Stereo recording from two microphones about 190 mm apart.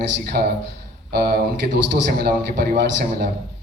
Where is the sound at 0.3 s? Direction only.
55° right (ahead or behind).